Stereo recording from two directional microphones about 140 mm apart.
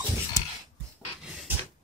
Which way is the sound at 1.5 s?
15° right (ahead or behind).